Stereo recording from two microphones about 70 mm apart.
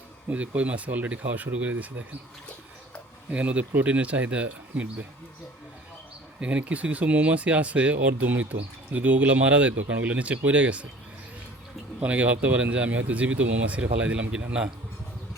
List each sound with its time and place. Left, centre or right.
0.3 s speech: centre
3.2 s speech: centre
6.4 s speech: centre
11.9 s speech: right